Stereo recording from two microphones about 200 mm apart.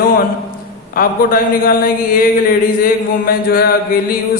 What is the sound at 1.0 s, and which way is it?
Speech, 45° left (ahead or behind).